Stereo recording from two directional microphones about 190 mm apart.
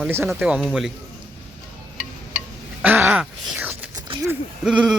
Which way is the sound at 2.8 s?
10° right (ahead or behind).